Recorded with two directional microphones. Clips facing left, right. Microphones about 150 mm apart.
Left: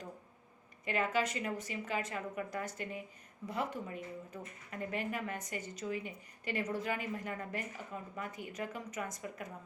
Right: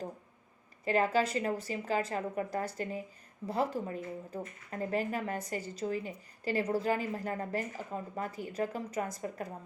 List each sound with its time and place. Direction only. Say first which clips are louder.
0.9 s speech: right 5 dB; 35° right (ahead or behind)